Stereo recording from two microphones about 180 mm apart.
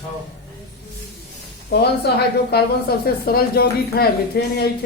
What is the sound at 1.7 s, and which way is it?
Speech, 65° left (ahead or behind).